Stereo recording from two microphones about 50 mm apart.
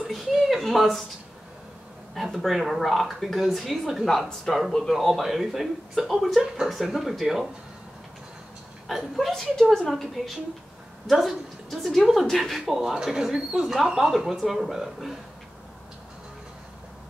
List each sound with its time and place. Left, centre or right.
0.1 s speech: centre
2.1 s a woman's voice: centre
8.8 s a woman's voice: centre